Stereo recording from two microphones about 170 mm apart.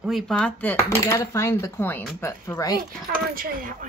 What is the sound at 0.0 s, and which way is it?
A woman's voice, centre (ahead or behind).